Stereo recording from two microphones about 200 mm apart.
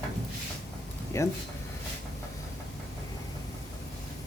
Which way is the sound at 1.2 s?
15° left (ahead or behind).